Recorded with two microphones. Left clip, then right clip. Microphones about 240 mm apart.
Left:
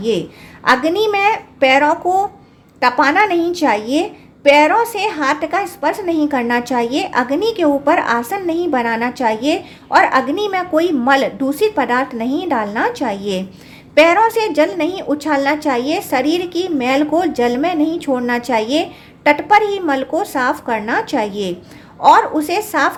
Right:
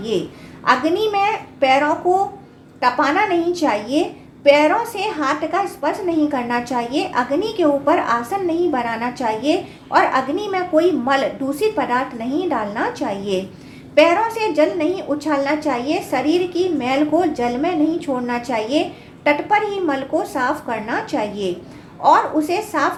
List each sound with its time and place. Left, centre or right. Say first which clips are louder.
0.6 s a woman's voice: left 3 dB; left